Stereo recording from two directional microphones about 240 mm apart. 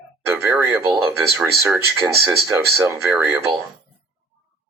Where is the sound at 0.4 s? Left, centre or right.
Centre.